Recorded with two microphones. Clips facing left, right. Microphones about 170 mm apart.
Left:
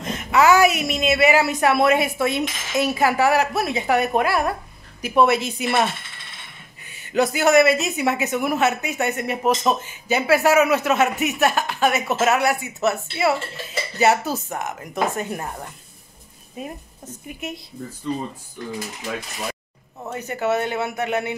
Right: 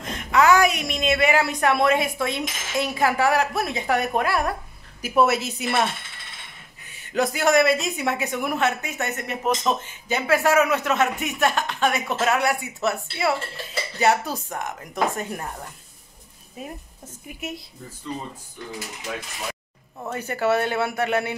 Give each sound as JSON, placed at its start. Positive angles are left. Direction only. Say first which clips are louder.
{"t": 0.0, "sound": "speech", "louder": "left 2 dB", "side_deg": 5}
{"t": 7.1, "sound": "speech", "louder": "left 3 dB", "side_deg": 0}
{"t": 20.1, "sound": "speech", "louder": "even", "side_deg": 20}